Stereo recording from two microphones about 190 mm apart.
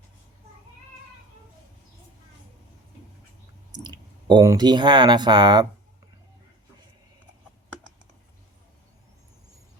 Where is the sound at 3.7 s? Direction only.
20° right (ahead or behind).